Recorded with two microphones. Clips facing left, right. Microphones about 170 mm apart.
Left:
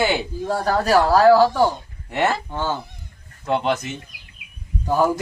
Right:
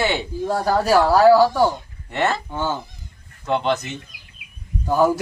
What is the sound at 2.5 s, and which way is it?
Speech, 10° right (ahead or behind).